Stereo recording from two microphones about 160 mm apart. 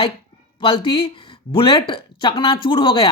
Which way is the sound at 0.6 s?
35° left (ahead or behind).